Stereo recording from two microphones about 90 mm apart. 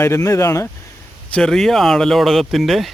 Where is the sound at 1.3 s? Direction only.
5° left (ahead or behind).